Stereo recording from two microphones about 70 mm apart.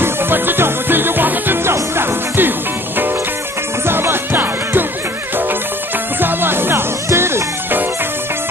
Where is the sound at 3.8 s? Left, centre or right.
Right.